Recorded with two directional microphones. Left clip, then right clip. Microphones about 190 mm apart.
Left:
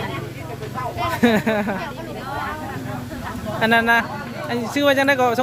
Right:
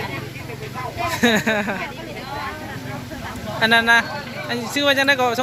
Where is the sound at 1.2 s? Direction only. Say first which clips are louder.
Right 1 dB; 10° left (ahead or behind).